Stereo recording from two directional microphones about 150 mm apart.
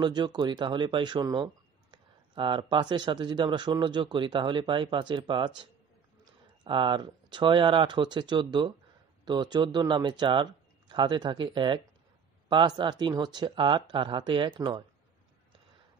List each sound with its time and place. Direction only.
0.0 s speech: 30° right (ahead or behind)